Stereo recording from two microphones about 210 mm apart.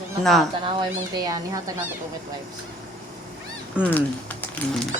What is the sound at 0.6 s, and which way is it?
Speech, 25° right (ahead or behind).